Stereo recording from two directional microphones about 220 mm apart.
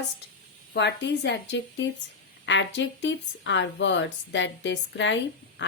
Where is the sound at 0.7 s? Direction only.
50° left (ahead or behind).